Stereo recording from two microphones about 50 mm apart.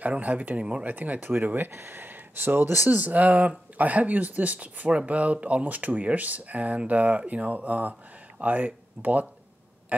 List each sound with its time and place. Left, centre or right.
0.0 s speech: right
1.7 s speech: right